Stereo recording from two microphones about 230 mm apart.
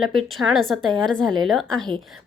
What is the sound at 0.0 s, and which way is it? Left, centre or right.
A woman's voice, centre.